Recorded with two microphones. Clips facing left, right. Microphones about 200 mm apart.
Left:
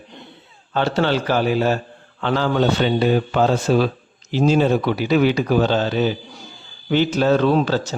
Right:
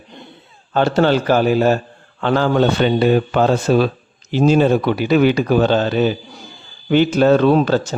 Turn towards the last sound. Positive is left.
turn(degrees=-55)  # may be behind; listen again after turning